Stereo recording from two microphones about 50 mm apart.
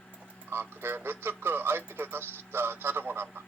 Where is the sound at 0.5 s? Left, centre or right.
Right.